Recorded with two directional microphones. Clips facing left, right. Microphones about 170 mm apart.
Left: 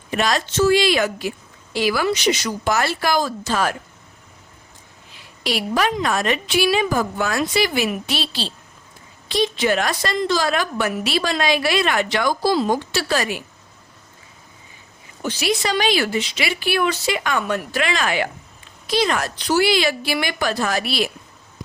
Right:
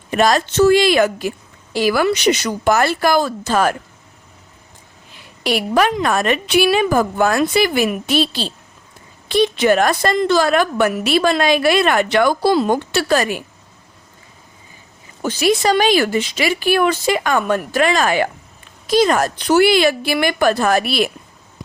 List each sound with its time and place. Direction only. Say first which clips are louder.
0.1 s a woman's voice: right 6 dB; 45° right (ahead or behind)
5.4 s a woman's voice: right 5 dB; 55° right (ahead or behind)
15.2 s a woman's voice: right 6 dB; 50° right (ahead or behind)